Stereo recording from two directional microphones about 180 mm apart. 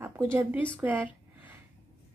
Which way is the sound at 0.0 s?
15° right (ahead or behind).